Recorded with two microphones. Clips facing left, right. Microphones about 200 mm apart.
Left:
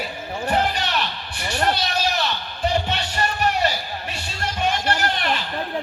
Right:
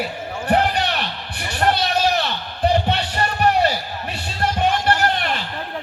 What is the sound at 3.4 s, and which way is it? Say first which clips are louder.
Music: right 6 dB; 60° right (ahead or behind).